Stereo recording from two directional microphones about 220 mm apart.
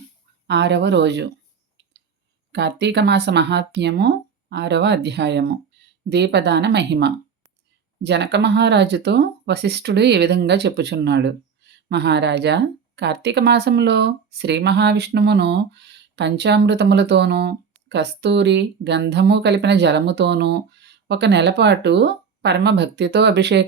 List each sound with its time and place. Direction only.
0.4 s speech: 50° right (ahead or behind)
2.5 s speech: 50° right (ahead or behind)